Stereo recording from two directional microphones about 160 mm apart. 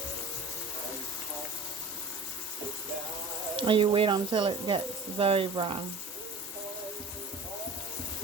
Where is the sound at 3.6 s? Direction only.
30° right (ahead or behind).